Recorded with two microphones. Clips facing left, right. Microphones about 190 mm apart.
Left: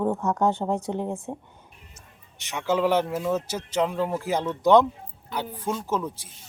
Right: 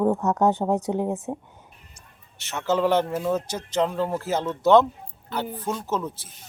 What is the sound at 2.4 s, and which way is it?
Speech, 15° left (ahead or behind).